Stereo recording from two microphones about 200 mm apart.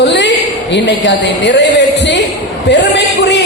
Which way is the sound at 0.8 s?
60° left (ahead or behind).